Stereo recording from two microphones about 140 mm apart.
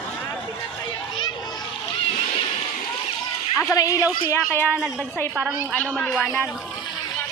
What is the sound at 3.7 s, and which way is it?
Speech, 25° left (ahead or behind).